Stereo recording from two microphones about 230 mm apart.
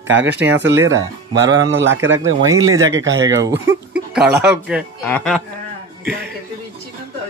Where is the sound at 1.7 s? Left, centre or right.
Right.